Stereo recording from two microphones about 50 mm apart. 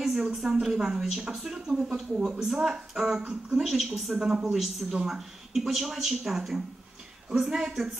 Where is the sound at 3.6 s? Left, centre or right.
Centre.